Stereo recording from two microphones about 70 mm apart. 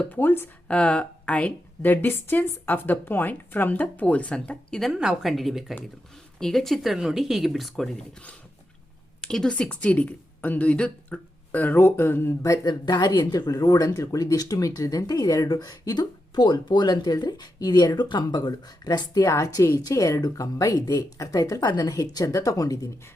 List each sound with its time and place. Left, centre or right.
0.1 s speech: left
1.8 s speech: left
4.9 s speech: centre
9.2 s speech: centre
9.5 s speech: centre; by 12.3 s left
12.4 s speech: left
19.2 s a woman's voice: left